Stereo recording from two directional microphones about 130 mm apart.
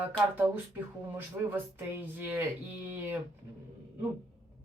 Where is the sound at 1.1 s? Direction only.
15° right (ahead or behind).